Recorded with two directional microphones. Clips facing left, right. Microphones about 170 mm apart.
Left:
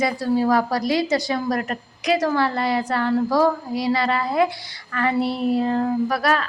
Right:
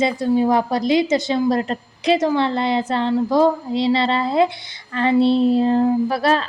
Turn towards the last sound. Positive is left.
turn(degrees=-25)  # may be behind; listen again after turning